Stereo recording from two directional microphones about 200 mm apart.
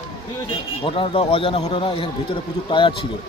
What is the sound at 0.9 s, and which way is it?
A man's voice, 25° left (ahead or behind).